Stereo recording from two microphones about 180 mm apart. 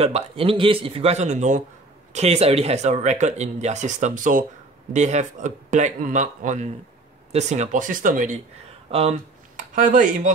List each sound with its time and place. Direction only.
0.0 s speech: 35° right (ahead or behind)
9.8 s speech: 45° right (ahead or behind)